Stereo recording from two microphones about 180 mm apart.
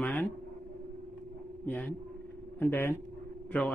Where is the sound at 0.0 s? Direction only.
10° left (ahead or behind).